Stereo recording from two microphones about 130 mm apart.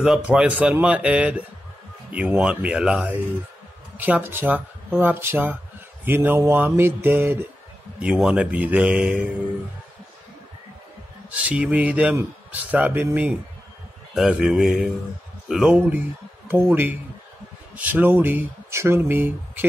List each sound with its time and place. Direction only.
0.0 s speech: 5° right (ahead or behind)
11.2 s speech: 10° right (ahead or behind)